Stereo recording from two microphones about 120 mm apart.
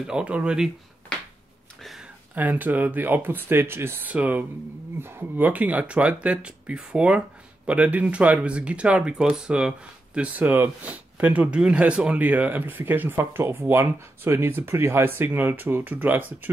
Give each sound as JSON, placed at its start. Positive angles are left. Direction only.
{"t": 0.0, "sound": "speech", "side_deg": -10}
{"t": 1.8, "sound": "a sound", "side_deg": 0}
{"t": 2.3, "sound": "speech", "side_deg": -15}